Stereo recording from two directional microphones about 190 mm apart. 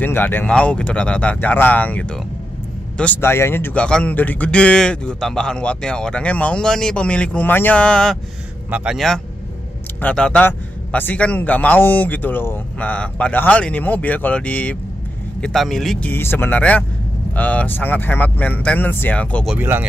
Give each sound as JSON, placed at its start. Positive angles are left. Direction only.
{"t": 0.0, "sound": "speech", "side_deg": 10}
{"t": 19.5, "sound": "speech", "side_deg": -10}